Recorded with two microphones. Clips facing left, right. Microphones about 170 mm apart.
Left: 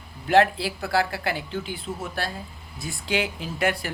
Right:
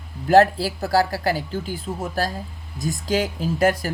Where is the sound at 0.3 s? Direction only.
40° right (ahead or behind).